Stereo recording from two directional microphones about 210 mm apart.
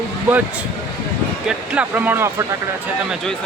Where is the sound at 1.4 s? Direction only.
5° right (ahead or behind).